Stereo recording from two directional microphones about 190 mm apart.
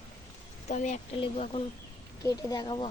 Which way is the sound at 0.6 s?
40° left (ahead or behind).